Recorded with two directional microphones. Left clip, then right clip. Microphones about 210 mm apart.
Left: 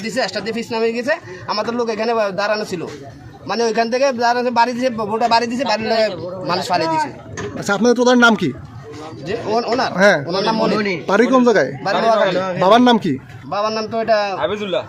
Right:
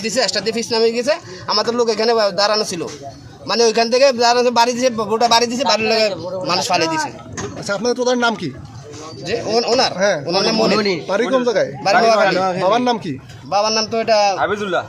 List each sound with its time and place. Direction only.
0.0 s a man's voice: 5° right (ahead or behind)
7.6 s speech: 55° left (ahead or behind)
9.2 s a man's voice: 5° right (ahead or behind)
9.9 s speech: 50° left (ahead or behind)
10.2 s a man's voice: 5° right (ahead or behind)
10.8 s a man's voice: 40° right (ahead or behind)
11.0 s speech: 50° left (ahead or behind)
12.4 s a man's voice: 40° right (ahead or behind)
12.6 s speech: 50° left (ahead or behind)
13.5 s a man's voice: 5° right (ahead or behind)
14.4 s a man's voice: 40° right (ahead or behind)